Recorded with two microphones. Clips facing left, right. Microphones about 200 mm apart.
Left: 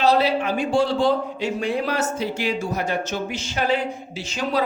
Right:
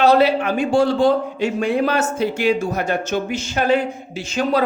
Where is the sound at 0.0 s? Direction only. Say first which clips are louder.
Right 4 dB; 55° right (ahead or behind).